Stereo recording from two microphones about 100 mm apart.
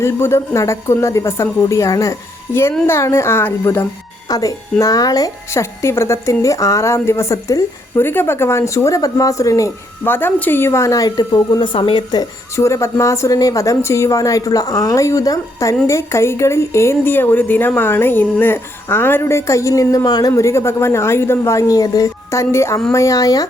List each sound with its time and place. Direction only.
0.0 s a woman's voice: 25° left (ahead or behind)
4.3 s a woman's voice: 35° left (ahead or behind)
12.5 s a woman's voice: 30° left (ahead or behind)